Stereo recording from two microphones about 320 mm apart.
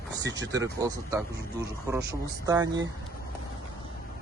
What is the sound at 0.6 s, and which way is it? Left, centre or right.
Speech, centre.